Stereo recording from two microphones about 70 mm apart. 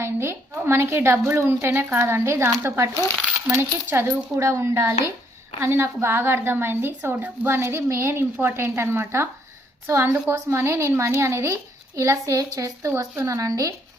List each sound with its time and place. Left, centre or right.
0.0 s a woman's voice: right